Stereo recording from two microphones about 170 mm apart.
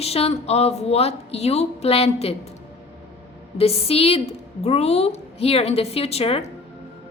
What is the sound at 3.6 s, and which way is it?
A woman's voice, 35° left (ahead or behind).